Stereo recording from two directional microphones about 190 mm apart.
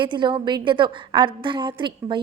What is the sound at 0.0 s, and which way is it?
A woman's voice, 25° right (ahead or behind).